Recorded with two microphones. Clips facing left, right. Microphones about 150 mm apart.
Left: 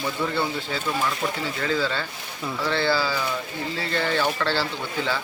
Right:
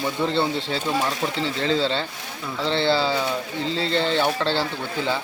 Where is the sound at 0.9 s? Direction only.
40° right (ahead or behind).